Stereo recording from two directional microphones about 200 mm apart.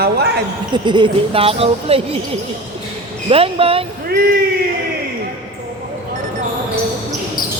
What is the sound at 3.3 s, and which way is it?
Speech, 30° right (ahead or behind).